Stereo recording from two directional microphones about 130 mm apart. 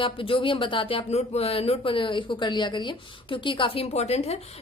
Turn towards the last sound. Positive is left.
turn(degrees=55)  # may be behind; listen again after turning